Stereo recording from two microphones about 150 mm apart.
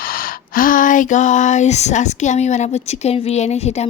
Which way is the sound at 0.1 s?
70° left (ahead or behind).